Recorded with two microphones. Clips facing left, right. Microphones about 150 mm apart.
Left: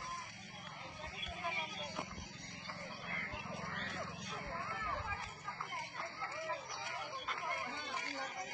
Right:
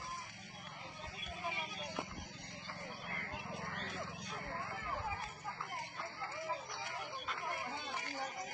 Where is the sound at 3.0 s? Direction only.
20° right (ahead or behind).